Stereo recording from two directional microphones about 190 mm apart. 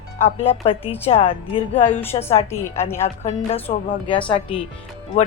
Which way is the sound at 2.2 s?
15° left (ahead or behind).